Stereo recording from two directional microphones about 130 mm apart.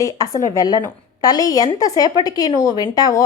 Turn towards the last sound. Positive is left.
turn(degrees=30)  # may be behind; listen again after turning